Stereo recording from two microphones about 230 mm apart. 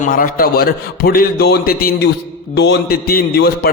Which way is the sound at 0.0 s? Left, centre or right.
Left.